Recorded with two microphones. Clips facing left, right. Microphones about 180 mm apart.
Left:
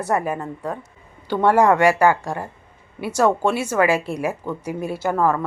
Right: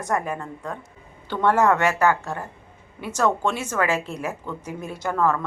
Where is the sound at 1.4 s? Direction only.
10° left (ahead or behind).